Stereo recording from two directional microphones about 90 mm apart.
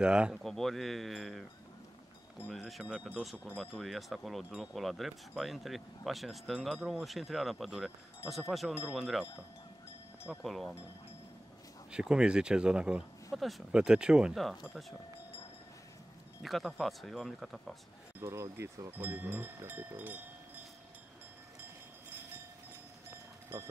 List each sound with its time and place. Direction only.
0.0 s speech: 10° right (ahead or behind)
0.4 s speech: 5° left (ahead or behind)
2.5 s speech: centre (ahead or behind)
2.8 s speech: 15° right (ahead or behind)
3.8 s speech: centre (ahead or behind)
10.4 s speech: centre (ahead or behind)
11.9 s speech: 10° right (ahead or behind)
16.4 s speech: centre (ahead or behind)
18.2 s speech: 30° right (ahead or behind)
20.0 s cowbell: 20° right (ahead or behind)
23.5 s speech: 25° right (ahead or behind)